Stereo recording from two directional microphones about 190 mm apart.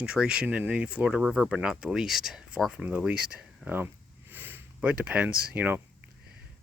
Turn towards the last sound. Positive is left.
turn(degrees=-10)  # may be behind; listen again after turning